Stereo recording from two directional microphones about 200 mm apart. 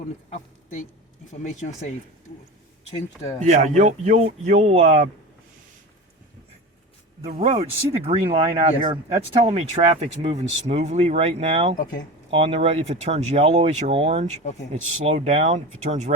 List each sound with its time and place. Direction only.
0.3 s a sound: 35° left (ahead or behind)
3.4 s speech: 35° right (ahead or behind)
7.3 s speech: 35° right (ahead or behind)